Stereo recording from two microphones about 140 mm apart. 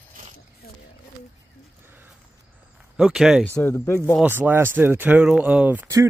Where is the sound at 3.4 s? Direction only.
15° left (ahead or behind).